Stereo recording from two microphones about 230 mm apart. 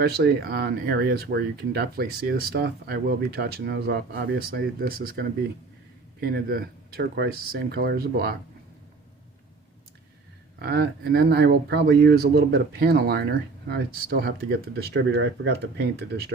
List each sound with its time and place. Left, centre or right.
0.0 s speech: right
10.6 s speech: right